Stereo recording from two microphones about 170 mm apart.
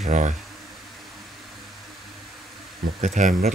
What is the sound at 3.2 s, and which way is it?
Speech, 55° right (ahead or behind).